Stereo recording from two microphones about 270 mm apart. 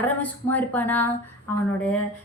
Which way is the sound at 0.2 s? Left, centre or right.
Centre.